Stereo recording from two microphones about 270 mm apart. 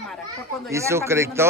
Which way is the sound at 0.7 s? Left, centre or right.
Centre.